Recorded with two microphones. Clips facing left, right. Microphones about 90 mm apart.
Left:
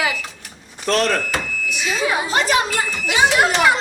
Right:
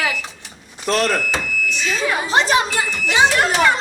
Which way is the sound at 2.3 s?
25° right (ahead or behind).